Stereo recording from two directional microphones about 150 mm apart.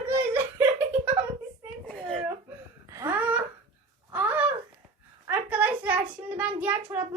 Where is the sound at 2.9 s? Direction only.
15° right (ahead or behind).